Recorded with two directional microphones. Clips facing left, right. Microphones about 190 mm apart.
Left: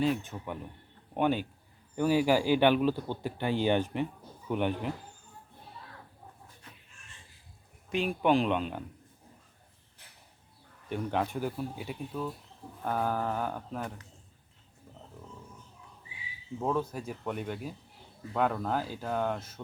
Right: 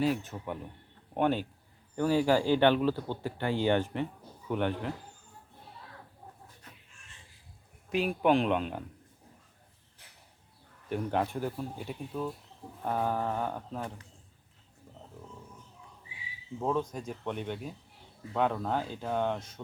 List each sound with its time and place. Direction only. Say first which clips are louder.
0.0 s speech: even; 5° right (ahead or behind); by 4.9 s 15° left (ahead or behind)
7.9 s speech: right 1 dB; 5° right (ahead or behind)
10.8 s speech: right 1 dB; 5° right (ahead or behind)
16.6 s speech: even; 5° left (ahead or behind)